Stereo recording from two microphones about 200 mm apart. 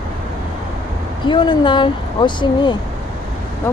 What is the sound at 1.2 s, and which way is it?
Speech, 25° left (ahead or behind).